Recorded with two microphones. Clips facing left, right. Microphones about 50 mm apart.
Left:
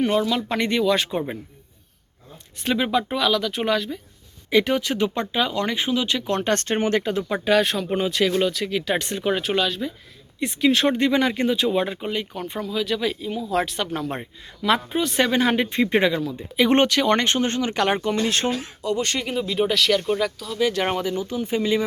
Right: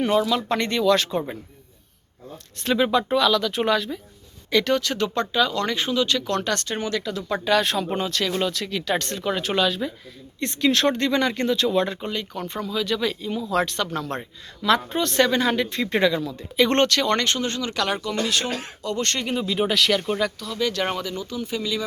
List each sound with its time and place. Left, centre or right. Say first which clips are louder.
0.0 s speech: even; centre
2.6 s speech: right 1 dB; centre
4.5 s speech: left 1 dB; centre; by 7.3 s left
7.3 s speech: right 1 dB; centre
9.4 s speech: right 1 dB; centre
15.5 s speech: left 3 dB; left
16.2 s speech: even; centre; by 18.5 s left
18.8 s speech: even; centre
20.6 s speech: left 3 dB; centre